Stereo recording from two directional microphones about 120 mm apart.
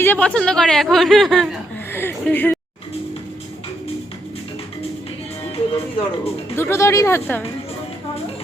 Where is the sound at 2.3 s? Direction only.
15° left (ahead or behind).